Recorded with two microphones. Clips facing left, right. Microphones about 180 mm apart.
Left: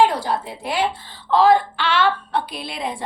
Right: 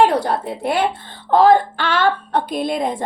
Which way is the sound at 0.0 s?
60° right (ahead or behind).